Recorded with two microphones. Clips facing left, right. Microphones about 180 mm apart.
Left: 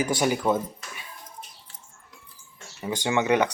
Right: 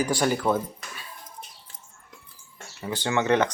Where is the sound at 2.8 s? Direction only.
15° left (ahead or behind).